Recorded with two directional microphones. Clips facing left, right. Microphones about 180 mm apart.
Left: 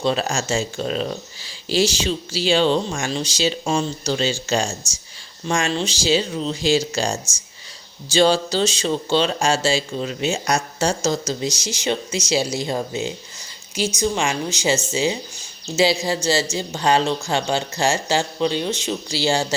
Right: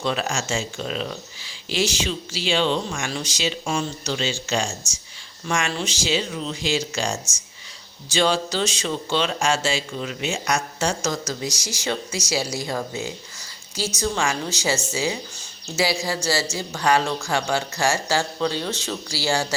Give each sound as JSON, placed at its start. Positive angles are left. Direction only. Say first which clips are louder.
{"t": 0.0, "sound": "speech", "louder": "left 4 dB", "side_deg": 30}